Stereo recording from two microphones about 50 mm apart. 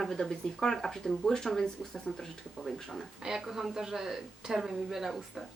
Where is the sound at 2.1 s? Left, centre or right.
Left.